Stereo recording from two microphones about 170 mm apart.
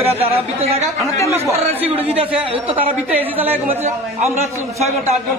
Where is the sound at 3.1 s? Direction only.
10° right (ahead or behind).